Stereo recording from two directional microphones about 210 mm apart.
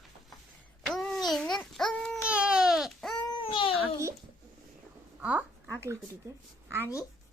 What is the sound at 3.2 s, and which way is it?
Baby cry, 20° left (ahead or behind).